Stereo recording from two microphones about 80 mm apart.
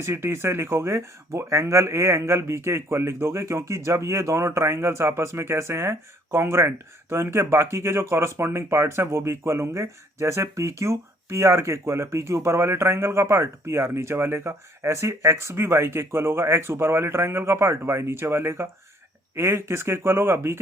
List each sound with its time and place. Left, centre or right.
0.0 s speech: right